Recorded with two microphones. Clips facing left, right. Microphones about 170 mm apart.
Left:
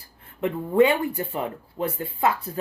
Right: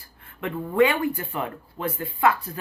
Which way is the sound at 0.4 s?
25° left (ahead or behind).